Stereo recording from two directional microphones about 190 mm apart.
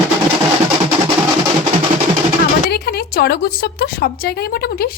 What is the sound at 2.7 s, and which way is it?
A woman's voice, 55° left (ahead or behind).